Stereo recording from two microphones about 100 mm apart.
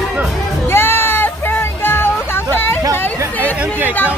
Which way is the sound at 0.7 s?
20° left (ahead or behind).